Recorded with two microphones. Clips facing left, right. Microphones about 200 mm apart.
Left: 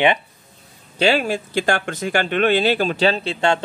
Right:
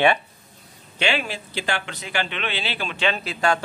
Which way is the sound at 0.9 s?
40° left (ahead or behind).